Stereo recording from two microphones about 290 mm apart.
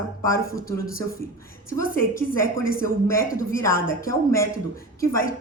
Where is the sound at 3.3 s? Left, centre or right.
Centre.